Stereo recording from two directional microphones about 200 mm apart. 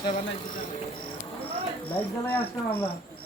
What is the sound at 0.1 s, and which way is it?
Speech, 30° left (ahead or behind).